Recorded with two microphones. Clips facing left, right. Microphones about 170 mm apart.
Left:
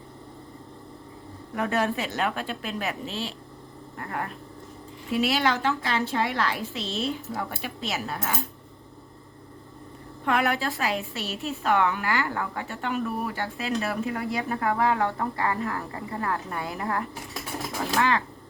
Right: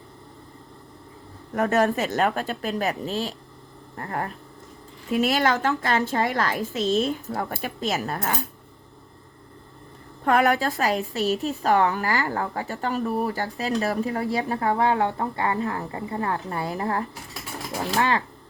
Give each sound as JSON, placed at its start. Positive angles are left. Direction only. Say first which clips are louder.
{"t": 1.5, "sound": "a woman's voice", "louder": "right 5 dB", "side_deg": -45}
{"t": 10.2, "sound": "a woman's voice", "louder": "right 5 dB", "side_deg": -40}